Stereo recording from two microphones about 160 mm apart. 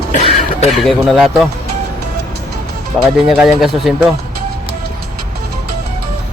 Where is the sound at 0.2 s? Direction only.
40° left (ahead or behind).